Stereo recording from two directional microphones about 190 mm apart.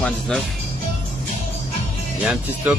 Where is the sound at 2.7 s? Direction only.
10° right (ahead or behind).